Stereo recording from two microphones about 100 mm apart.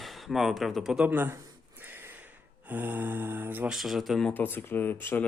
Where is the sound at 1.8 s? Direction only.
20° right (ahead or behind).